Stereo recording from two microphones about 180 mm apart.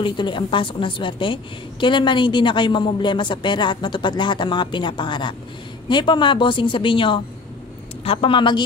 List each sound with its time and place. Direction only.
0.0 s a woman's voice: 25° left (ahead or behind)